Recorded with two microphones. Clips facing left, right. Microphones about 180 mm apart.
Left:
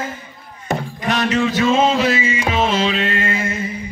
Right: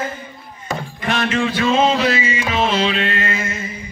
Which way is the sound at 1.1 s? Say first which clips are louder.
Left 2 dB; centre (ahead or behind).